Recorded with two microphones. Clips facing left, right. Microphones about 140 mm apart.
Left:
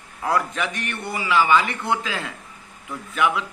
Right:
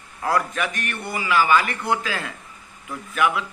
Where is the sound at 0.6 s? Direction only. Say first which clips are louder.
Even; 25° left (ahead or behind).